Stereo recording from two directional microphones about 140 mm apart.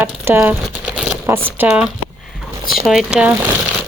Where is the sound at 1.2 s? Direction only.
15° right (ahead or behind).